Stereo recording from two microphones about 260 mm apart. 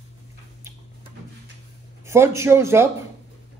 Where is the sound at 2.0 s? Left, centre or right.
Centre.